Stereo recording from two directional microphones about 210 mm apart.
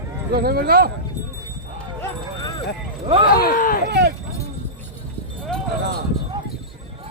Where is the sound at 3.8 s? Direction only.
55° right (ahead or behind).